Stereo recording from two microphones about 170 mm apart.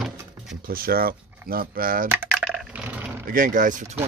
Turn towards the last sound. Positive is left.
turn(degrees=-50)  # may be behind; listen again after turning